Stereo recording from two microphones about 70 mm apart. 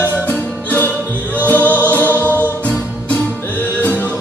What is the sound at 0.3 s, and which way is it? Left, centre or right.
Music, left.